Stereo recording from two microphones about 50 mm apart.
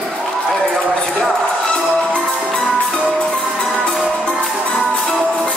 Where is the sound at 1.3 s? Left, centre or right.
Centre.